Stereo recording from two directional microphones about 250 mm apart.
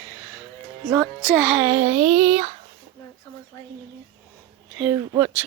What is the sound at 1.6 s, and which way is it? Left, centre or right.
Speech, centre.